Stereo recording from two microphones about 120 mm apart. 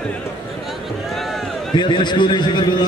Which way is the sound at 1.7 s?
40° left (ahead or behind).